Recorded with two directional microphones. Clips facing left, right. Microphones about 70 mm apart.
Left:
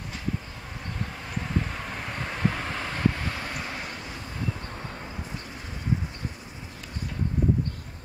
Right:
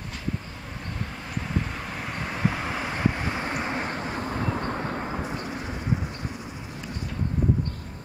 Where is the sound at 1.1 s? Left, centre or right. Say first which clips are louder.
Even; centre; by 5.2 s right.